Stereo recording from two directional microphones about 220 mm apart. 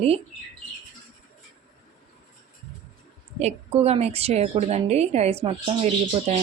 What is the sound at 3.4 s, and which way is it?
A woman's voice, 30° right (ahead or behind).